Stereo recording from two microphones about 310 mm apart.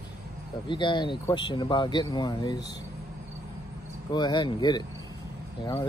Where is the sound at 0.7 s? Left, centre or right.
Centre.